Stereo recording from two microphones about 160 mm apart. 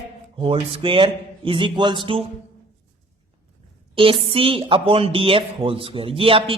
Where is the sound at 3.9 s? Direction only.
35° right (ahead or behind).